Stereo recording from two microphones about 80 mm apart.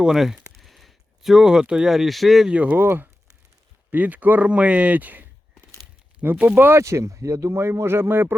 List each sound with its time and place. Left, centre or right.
0.0 s speech: centre
2.5 s speech: centre
2.7 s speech: right
6.6 s speech: right